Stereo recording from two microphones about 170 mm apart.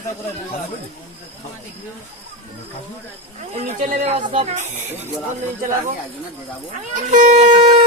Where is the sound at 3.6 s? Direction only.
45° right (ahead or behind).